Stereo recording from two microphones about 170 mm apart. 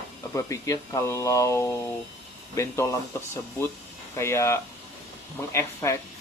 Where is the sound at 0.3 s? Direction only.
20° left (ahead or behind).